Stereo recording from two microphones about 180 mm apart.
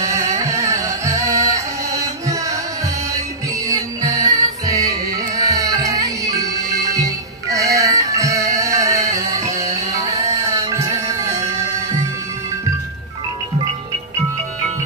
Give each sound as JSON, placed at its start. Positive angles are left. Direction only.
{"t": 0.0, "sound": "music", "side_deg": -15}
{"t": 3.6, "sound": "music", "side_deg": -20}